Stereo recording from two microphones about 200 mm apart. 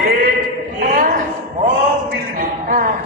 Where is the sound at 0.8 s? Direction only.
45° right (ahead or behind).